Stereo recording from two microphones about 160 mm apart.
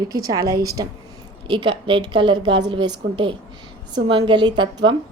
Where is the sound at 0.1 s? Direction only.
25° right (ahead or behind).